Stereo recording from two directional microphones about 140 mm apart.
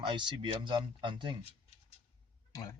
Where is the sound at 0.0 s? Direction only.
35° right (ahead or behind).